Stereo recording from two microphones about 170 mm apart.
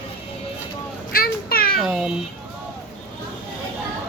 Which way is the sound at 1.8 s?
Centre (ahead or behind).